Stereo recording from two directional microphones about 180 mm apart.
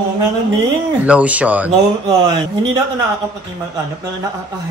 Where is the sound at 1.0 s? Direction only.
10° right (ahead or behind).